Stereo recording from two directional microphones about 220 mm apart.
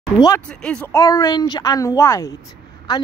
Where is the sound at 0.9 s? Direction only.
15° left (ahead or behind).